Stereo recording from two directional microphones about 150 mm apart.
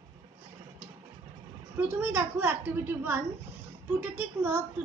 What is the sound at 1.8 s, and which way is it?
A woman's voice, 15° right (ahead or behind).